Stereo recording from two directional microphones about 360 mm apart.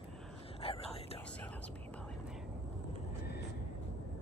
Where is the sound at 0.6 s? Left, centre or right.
Centre.